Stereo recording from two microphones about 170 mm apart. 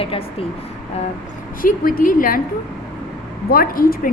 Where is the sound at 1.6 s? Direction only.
55° left (ahead or behind).